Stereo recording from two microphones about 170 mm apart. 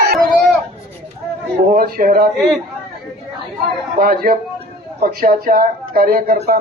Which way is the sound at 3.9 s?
60° right (ahead or behind).